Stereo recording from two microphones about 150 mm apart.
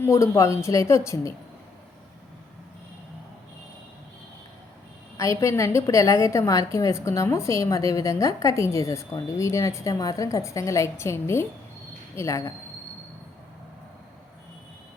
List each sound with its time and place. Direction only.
0.0 s a woman's voice: 20° left (ahead or behind)
5.1 s a woman's voice: 20° left (ahead or behind)